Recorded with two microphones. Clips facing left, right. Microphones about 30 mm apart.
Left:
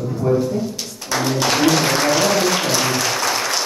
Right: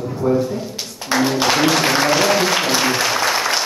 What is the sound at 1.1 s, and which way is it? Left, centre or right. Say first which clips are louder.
Music: right 2 dB; centre.